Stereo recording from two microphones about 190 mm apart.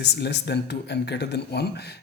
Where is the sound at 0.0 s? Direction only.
60° left (ahead or behind).